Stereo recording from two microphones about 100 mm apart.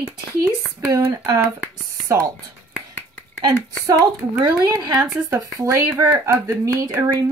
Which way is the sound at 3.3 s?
40° right (ahead or behind).